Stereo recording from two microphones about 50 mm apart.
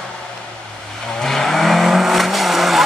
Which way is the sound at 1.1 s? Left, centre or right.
Centre.